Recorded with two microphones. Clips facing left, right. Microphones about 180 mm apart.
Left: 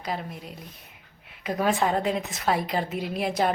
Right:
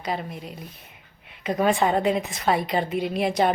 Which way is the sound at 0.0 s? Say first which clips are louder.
Right 3 dB; centre (ahead or behind).